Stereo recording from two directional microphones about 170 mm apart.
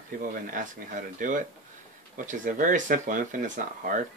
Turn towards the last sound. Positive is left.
turn(degrees=-50)  # may be behind; listen again after turning